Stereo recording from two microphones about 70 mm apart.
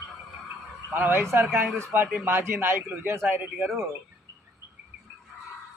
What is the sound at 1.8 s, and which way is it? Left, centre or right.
A man's voice, right.